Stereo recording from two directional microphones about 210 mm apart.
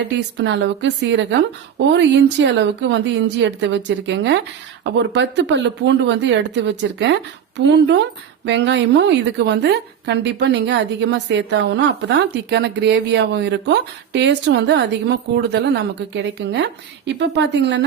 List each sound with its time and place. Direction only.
0.3 s a woman's voice: 55° right (ahead or behind)